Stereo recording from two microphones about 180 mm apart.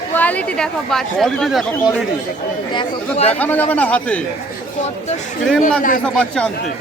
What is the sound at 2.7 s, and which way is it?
Speech, 35° left (ahead or behind).